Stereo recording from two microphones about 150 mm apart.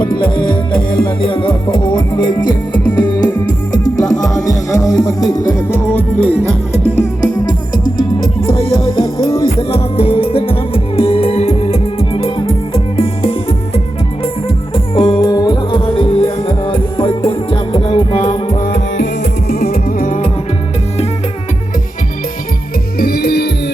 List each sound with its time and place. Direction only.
0.0 s music: 30° left (ahead or behind)
3.7 s music: 25° left (ahead or behind); by 6.9 s 10° left (ahead or behind)
7.4 s music: 35° left (ahead or behind)
14.9 s music: 35° left (ahead or behind)
19.2 s music: 90° left; by 20.3 s 55° left (ahead or behind)
23.0 s music: 90° left